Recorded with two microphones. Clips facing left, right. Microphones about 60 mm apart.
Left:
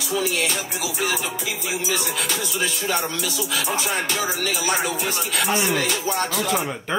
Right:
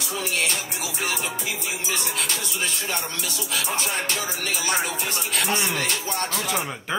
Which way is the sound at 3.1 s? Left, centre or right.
Right.